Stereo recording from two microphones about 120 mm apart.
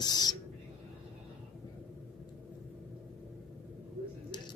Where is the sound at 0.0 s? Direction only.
35° left (ahead or behind).